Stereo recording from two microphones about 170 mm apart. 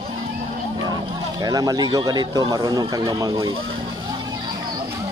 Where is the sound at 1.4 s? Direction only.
20° right (ahead or behind).